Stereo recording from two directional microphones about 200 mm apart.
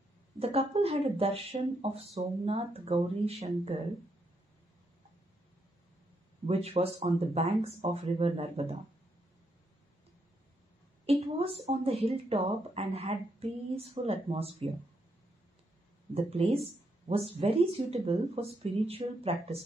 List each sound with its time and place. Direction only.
0.4 s speech: 30° right (ahead or behind)
6.4 s speech: 30° right (ahead or behind)
11.1 s speech: 30° right (ahead or behind)
16.2 s speech: 30° right (ahead or behind)